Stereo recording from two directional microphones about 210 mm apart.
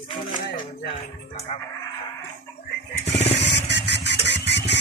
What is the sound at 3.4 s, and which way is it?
Vehicle, 55° left (ahead or behind).